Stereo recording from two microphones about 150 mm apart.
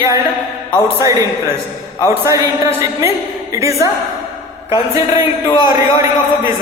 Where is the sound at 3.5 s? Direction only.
20° right (ahead or behind).